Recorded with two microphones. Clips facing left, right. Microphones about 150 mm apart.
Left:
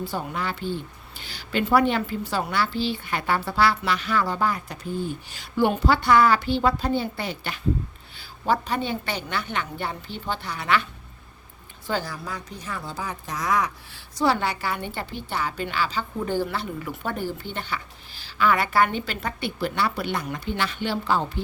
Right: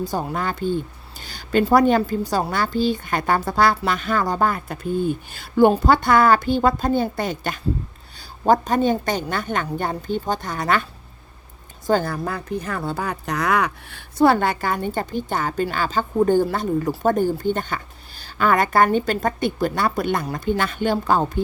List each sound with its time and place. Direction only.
0.0 s a woman's voice: 40° right (ahead or behind)
11.9 s speech: 50° right (ahead or behind)